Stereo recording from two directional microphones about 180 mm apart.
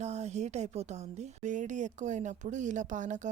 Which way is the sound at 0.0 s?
40° right (ahead or behind).